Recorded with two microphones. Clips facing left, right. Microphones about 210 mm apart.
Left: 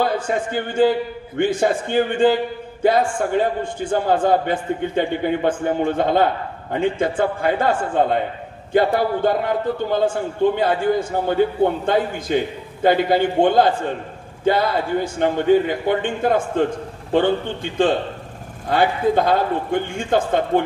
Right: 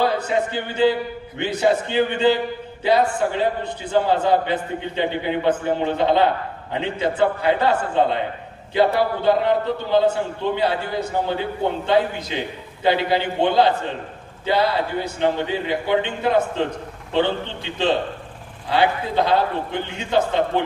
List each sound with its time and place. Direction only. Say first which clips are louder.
0.0 s a man's voice: even; 50° left (ahead or behind)